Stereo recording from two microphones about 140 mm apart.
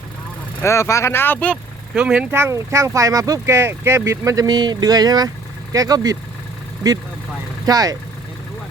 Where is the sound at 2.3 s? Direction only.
20° right (ahead or behind).